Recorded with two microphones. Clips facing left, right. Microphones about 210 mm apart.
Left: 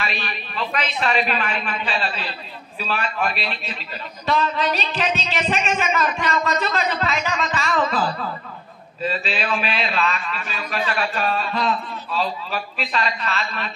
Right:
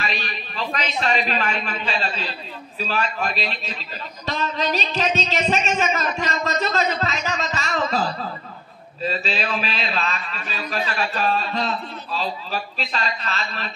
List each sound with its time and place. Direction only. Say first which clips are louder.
0.0 s a woman's voice: even; 35° right (ahead or behind)
3.2 s a man's voice: left 1 dB; 35° right (ahead or behind)